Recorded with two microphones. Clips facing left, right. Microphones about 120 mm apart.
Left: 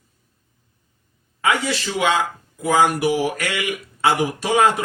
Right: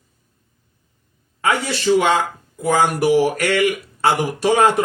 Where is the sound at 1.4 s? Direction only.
45° right (ahead or behind).